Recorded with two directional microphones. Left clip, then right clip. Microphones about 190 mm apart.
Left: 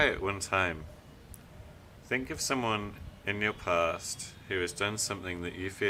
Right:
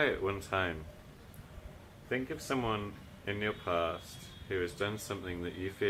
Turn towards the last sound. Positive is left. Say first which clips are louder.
# left 2 dB
turn(degrees=15)  # may be behind; listen again after turning